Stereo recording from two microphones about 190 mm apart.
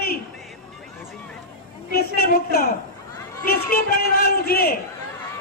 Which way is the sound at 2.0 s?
50° left (ahead or behind).